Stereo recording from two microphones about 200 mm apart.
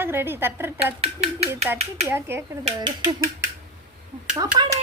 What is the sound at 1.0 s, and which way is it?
Speech, 30° right (ahead or behind).